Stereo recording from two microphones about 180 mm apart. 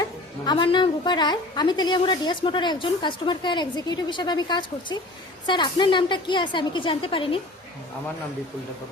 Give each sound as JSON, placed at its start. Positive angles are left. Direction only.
{"t": 0.0, "sound": "a woman's voice", "side_deg": 25}